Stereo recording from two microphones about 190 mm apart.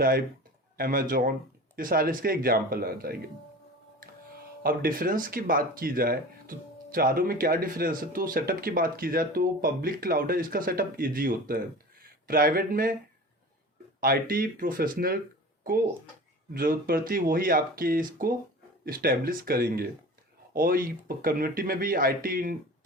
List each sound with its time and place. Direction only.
0.8 s speech: 50° right (ahead or behind)
4.6 s speech: 50° right (ahead or behind)
14.0 s speech: 50° right (ahead or behind)
16.6 s speech: 50° right (ahead or behind)